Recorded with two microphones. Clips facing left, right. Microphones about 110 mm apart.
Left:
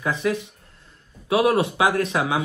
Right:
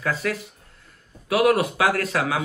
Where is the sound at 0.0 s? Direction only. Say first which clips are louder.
Left 2 dB; 20° left (ahead or behind).